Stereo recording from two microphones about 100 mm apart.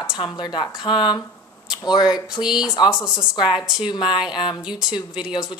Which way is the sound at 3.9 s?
50° left (ahead or behind).